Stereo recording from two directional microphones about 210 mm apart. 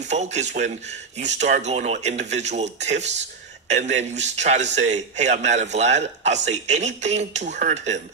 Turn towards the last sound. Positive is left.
turn(degrees=-35)  # may be behind; listen again after turning